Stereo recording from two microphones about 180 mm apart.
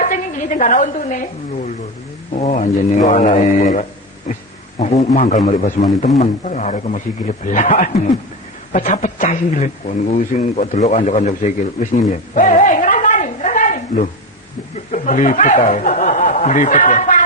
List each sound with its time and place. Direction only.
0.0 s a man's voice: 45° left (ahead or behind)
12.3 s a sound: 45° left (ahead or behind)
14.9 s speech: 45° left (ahead or behind)